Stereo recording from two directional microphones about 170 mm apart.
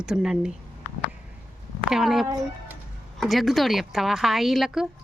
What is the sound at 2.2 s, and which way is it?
Speech, 15° right (ahead or behind).